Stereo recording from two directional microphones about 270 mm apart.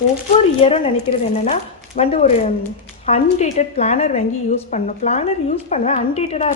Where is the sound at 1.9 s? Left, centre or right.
Left.